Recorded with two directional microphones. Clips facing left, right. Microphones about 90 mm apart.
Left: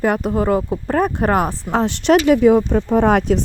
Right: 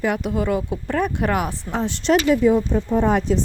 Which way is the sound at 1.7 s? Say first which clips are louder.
Left 4 dB; 65° left (ahead or behind).